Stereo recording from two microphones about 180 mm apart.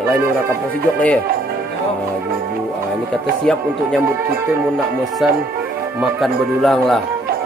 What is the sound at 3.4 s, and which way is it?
Speech, 5° left (ahead or behind).